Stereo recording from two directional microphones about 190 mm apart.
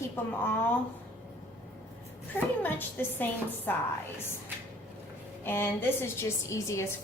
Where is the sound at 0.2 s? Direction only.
10° left (ahead or behind).